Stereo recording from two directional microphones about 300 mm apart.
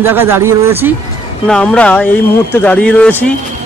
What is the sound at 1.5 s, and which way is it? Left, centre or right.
Speech, centre.